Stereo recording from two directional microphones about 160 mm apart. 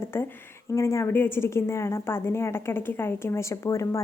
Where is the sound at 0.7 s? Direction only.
15° left (ahead or behind).